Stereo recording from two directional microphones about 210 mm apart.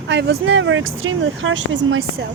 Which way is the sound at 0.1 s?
55° right (ahead or behind).